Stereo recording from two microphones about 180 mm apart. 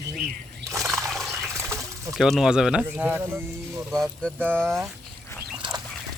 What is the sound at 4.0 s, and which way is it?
Speech, 5° left (ahead or behind).